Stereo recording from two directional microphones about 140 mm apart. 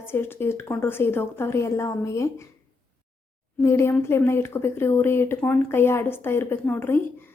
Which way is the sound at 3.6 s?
20° left (ahead or behind).